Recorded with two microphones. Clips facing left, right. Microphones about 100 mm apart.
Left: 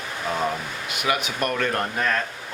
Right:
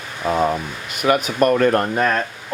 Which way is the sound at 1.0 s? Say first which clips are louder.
Right 8 dB; 40° right (ahead or behind).